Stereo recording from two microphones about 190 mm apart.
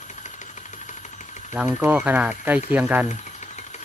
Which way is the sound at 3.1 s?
40° left (ahead or behind).